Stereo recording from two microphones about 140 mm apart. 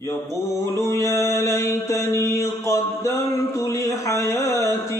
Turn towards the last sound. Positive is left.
turn(degrees=20)  # may be behind; listen again after turning